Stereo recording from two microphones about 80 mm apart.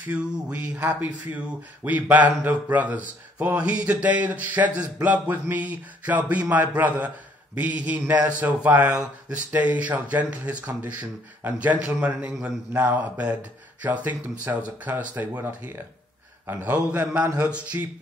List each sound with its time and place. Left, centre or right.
0.1 s a man's voice: centre